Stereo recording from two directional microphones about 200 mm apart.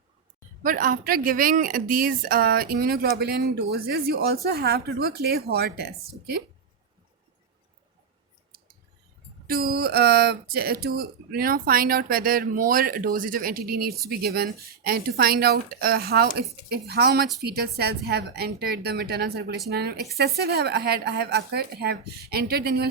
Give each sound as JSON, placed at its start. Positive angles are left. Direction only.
{"t": 0.6, "sound": "speech", "side_deg": -45}
{"t": 9.5, "sound": "speech", "side_deg": -50}